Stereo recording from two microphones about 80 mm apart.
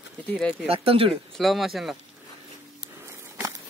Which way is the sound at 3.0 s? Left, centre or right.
Right.